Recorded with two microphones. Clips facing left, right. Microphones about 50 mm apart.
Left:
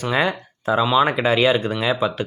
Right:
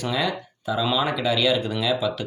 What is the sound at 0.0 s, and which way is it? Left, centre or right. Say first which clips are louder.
Speech: left 4 dB; left.